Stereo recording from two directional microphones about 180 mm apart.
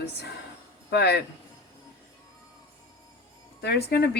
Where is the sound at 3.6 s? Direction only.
65° left (ahead or behind).